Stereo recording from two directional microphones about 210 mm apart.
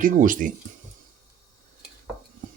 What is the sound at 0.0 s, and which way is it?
Speech, 40° right (ahead or behind).